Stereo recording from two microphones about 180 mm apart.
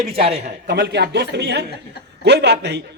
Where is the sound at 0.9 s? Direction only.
70° right (ahead or behind).